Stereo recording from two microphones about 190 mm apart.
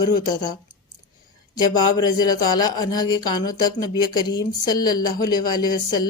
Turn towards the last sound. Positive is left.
turn(degrees=20)  # may be behind; listen again after turning